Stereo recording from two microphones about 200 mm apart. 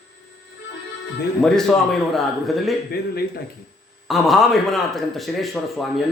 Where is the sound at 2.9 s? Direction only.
50° left (ahead or behind).